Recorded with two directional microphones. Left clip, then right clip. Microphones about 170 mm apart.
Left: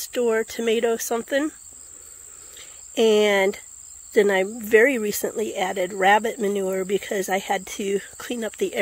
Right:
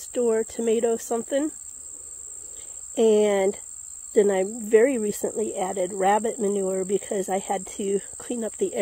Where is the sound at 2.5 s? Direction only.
20° right (ahead or behind).